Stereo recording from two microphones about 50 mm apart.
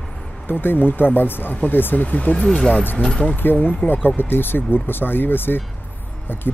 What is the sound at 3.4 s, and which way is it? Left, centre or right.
Speech, left.